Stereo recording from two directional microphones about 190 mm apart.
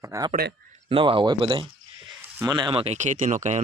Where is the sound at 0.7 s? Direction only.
30° right (ahead or behind).